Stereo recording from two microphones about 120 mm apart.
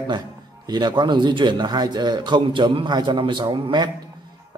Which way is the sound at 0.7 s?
35° right (ahead or behind).